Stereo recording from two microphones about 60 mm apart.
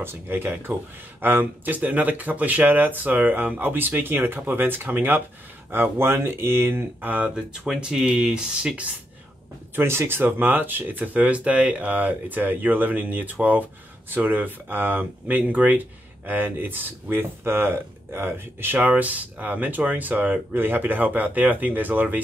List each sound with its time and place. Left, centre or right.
0.0 s speech: right
7.6 s speech: centre
9.8 s speech: right